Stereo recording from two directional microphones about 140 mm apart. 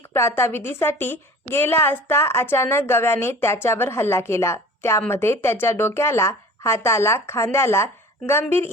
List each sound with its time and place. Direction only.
0.1 s a woman's voice: 20° left (ahead or behind)